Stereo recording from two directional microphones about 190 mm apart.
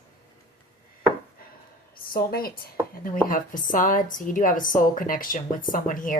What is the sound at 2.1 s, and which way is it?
A woman's voice, 50° left (ahead or behind).